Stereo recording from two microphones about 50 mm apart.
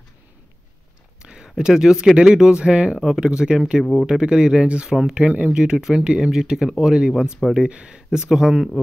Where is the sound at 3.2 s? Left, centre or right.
Centre.